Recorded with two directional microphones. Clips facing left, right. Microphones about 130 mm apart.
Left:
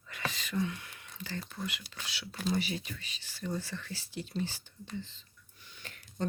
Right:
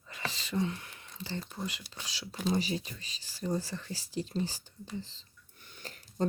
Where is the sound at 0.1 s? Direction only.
30° right (ahead or behind).